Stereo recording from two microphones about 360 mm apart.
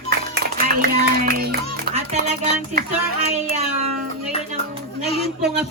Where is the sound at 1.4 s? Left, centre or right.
Right.